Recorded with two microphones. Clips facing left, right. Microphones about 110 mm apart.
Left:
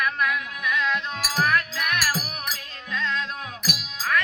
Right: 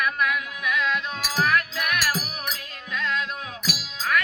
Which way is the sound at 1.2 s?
Centre (ahead or behind).